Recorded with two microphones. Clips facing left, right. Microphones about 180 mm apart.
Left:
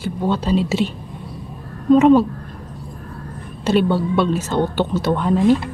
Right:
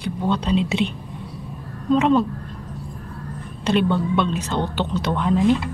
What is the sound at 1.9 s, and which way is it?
Speech, 10° left (ahead or behind).